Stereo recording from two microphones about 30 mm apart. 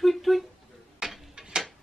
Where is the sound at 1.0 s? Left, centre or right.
Right.